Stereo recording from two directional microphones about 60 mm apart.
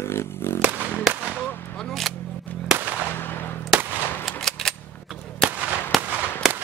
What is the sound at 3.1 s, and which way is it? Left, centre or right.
Gunshot, left.